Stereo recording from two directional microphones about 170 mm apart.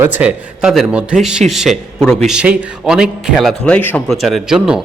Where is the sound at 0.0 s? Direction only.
10° right (ahead or behind).